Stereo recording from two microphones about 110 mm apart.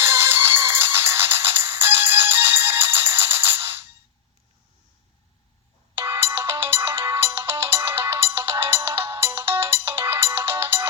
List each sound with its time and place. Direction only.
0.0 s music: 20° right (ahead or behind)
6.0 s ringtone: 20° right (ahead or behind)